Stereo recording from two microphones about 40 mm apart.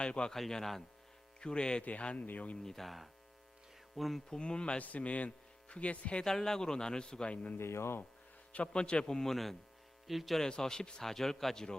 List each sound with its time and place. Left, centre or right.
0.0 s speech: left
0.3 s a man's voice: centre
1.4 s speech: left
1.8 s a man's voice: left
2.6 s speech: centre
3.9 s hum: centre
4.3 s speech: left
4.8 s speech: left
6.2 s a man's voice: centre
7.6 s speech: left
8.7 s a man's voice: left; by 10.4 s centre
10.4 s a man's voice: centre